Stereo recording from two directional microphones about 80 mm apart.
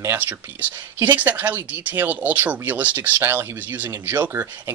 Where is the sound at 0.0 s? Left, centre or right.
Right.